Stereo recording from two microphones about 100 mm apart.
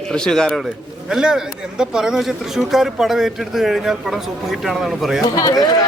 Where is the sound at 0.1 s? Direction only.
5° left (ahead or behind).